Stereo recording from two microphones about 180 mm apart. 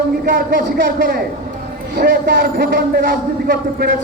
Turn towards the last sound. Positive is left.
turn(degrees=-60)  # may be behind; listen again after turning